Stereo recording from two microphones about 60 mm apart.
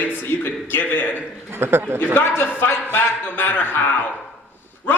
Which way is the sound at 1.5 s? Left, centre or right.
Right.